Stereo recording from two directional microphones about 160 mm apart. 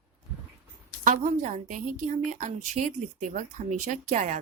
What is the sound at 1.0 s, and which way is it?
A woman's voice, 50° right (ahead or behind).